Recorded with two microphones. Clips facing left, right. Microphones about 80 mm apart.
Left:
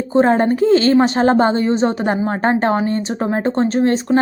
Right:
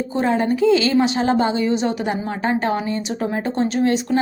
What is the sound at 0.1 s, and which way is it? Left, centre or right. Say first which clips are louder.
A woman's voice: left 7 dB; left.